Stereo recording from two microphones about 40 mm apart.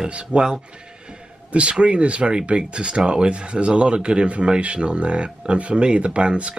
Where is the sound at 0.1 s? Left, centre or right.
Right.